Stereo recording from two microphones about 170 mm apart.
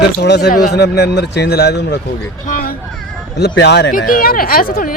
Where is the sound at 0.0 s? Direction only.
90° left; by 2.0 s 75° left (ahead or behind).